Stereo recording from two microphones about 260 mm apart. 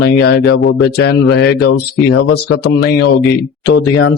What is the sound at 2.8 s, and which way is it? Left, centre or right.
Speech, left.